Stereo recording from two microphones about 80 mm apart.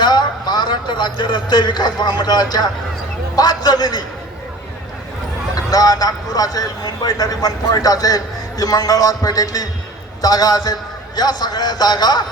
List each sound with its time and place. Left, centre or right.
0.0 s a man's voice: left
5.5 s a man's voice: left